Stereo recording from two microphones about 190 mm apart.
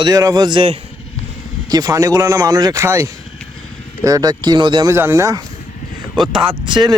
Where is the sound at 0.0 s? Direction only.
15° right (ahead or behind).